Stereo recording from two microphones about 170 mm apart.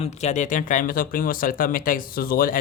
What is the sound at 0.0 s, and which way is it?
Speech, 40° left (ahead or behind).